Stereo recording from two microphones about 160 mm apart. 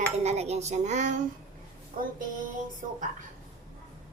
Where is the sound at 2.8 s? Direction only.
55° right (ahead or behind).